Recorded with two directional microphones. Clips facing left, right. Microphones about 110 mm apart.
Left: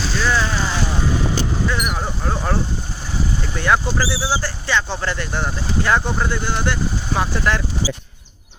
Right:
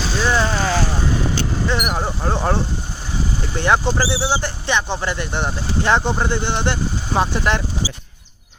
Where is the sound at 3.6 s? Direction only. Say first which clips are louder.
Right 1 dB; 25° right (ahead or behind).